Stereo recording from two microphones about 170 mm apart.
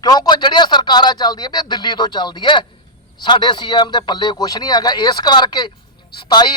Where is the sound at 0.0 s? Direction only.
25° left (ahead or behind).